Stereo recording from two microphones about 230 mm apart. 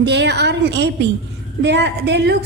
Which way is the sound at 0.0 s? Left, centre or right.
Right.